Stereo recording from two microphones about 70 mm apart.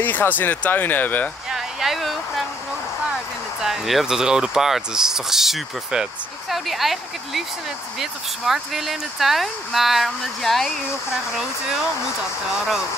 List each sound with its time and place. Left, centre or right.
0.0 s speech: left
1.5 s a sound: centre
3.6 s speech: centre
12.5 s speech: centre